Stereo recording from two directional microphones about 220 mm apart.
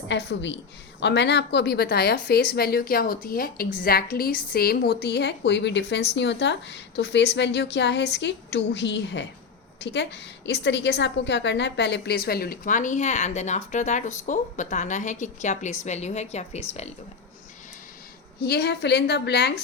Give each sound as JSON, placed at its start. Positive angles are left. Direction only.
{"t": 0.1, "sound": "a woman's voice", "side_deg": 50}
{"t": 18.3, "sound": "a woman's voice", "side_deg": 45}